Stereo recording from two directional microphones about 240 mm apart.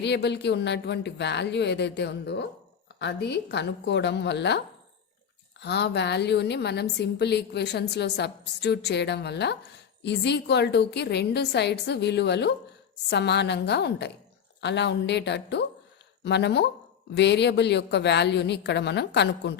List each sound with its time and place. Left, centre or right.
0.0 s a woman's voice: left